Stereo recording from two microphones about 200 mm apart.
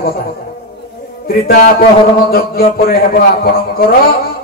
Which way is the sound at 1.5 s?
45° left (ahead or behind).